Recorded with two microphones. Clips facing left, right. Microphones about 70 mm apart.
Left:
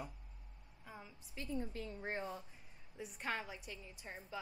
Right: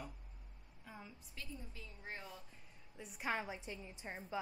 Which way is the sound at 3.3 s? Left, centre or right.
Right.